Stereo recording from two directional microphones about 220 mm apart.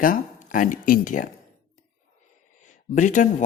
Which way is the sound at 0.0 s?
40° left (ahead or behind).